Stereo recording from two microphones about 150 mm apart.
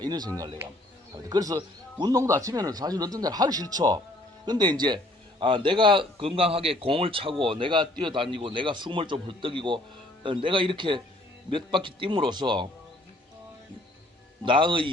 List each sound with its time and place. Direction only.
0.0 s a man's voice: 30° right (ahead or behind)
14.4 s a man's voice: 35° right (ahead or behind)